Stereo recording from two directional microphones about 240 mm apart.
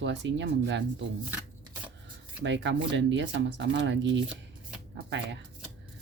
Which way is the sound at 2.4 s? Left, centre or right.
Right.